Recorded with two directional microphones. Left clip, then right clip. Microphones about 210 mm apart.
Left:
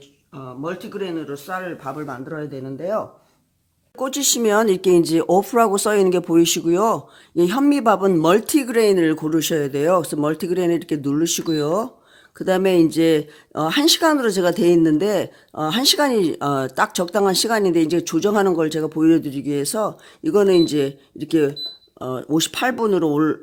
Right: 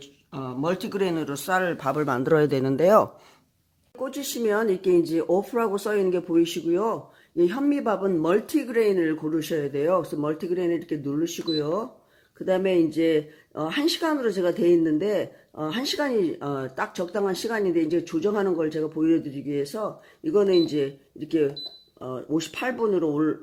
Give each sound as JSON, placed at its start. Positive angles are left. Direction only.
{"t": 0.3, "sound": "speech", "side_deg": -50}
{"t": 3.9, "sound": "speech", "side_deg": 45}